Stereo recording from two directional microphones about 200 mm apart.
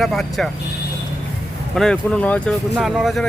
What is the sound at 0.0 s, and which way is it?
Speech, centre (ahead or behind).